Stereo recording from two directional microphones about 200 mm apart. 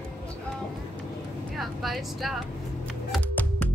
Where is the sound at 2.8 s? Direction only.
5° left (ahead or behind).